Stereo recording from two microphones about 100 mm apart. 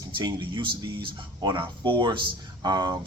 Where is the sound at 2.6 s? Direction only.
45° right (ahead or behind).